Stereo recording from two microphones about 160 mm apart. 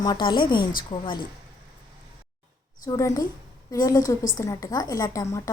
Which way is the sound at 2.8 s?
20° left (ahead or behind).